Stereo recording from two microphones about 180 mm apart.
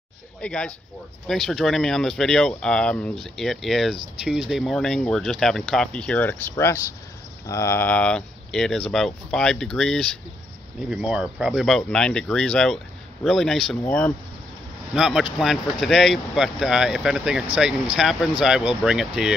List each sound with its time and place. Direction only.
0.4 s speech: 5° left (ahead or behind)